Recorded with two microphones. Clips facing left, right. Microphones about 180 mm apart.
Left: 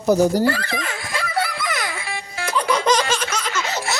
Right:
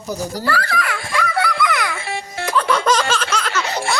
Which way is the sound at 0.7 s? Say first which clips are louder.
Right 3 dB; 20° left (ahead or behind).